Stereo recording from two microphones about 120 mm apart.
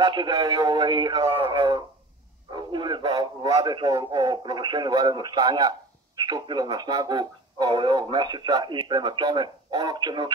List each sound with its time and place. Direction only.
0.0 s speech: 40° right (ahead or behind)